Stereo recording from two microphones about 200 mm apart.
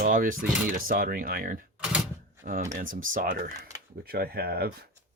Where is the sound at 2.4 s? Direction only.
40° right (ahead or behind).